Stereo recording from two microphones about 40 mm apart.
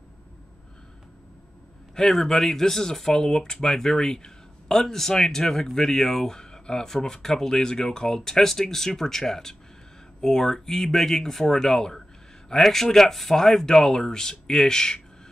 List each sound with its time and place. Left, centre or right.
2.0 s speech: centre